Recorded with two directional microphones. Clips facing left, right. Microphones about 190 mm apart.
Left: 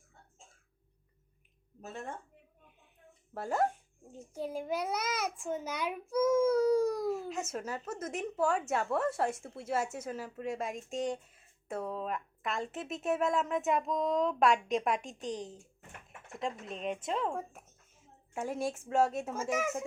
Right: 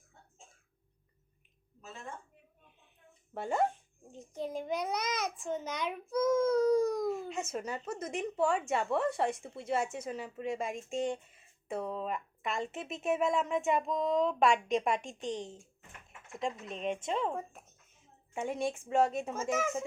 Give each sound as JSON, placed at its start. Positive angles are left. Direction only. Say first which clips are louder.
{"t": 1.8, "sound": "speech", "louder": "left 4 dB", "side_deg": 60}
{"t": 3.3, "sound": "a child's voice", "louder": "even", "side_deg": 0}